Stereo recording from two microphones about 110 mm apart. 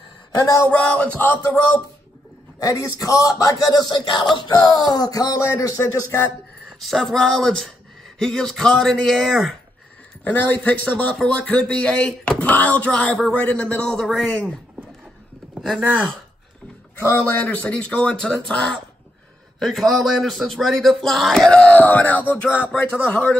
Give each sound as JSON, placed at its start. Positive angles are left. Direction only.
{"t": 0.4, "sound": "a man's voice", "side_deg": 30}
{"t": 0.7, "sound": "a man's voice", "side_deg": 10}
{"t": 2.6, "sound": "speech", "side_deg": 30}
{"t": 6.8, "sound": "a man's voice", "side_deg": 5}
{"t": 17.0, "sound": "a man's voice", "side_deg": 20}